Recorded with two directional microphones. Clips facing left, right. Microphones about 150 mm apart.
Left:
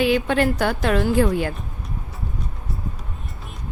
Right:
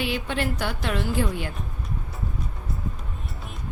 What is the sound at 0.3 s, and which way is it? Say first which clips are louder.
A woman's voice: left 8 dB; 50° left (ahead or behind).